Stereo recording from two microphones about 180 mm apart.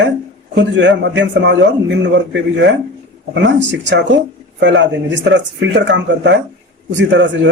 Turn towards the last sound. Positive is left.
turn(degrees=-80)